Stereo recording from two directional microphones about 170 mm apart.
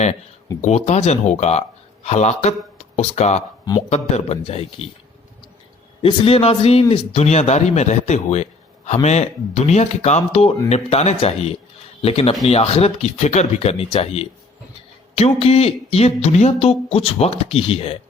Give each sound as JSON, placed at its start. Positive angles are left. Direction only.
{"t": 0.6, "sound": "speech", "side_deg": 40}
{"t": 6.0, "sound": "speech", "side_deg": 35}